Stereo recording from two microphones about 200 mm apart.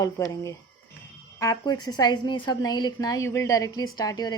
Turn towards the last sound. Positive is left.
turn(degrees=20)  # may be behind; listen again after turning